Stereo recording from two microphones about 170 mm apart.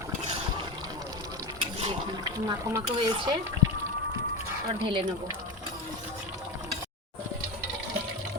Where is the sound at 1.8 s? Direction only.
30° right (ahead or behind).